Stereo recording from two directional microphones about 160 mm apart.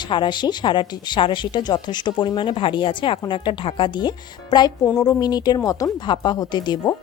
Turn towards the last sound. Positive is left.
turn(degrees=25)  # may be behind; listen again after turning